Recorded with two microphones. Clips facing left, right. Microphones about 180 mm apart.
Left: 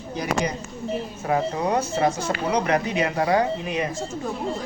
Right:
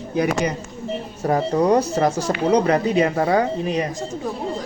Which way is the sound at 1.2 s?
35° right (ahead or behind).